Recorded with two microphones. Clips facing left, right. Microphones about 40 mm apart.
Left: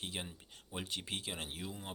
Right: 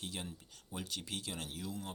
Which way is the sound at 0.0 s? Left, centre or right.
Left.